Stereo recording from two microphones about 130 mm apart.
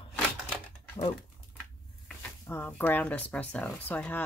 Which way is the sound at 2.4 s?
15° left (ahead or behind).